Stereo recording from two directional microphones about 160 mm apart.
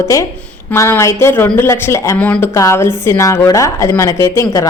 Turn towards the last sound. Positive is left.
turn(degrees=20)  # may be behind; listen again after turning